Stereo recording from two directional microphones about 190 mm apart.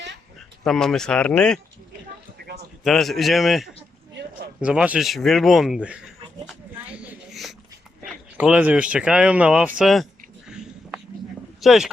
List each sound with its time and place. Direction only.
0.6 s speech: centre (ahead or behind)
2.8 s speech: centre (ahead or behind)
6.7 s a sound: 10° right (ahead or behind)
8.4 s speech: 10° right (ahead or behind)
11.6 s speech: centre (ahead or behind)